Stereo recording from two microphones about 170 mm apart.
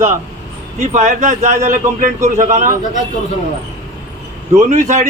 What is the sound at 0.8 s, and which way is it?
A man's voice, 45° right (ahead or behind).